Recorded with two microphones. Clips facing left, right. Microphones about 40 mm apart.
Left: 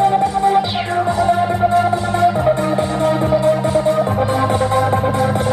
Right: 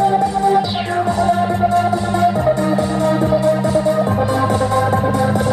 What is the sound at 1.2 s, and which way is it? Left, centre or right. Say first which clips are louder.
Music: left 1 dB; centre.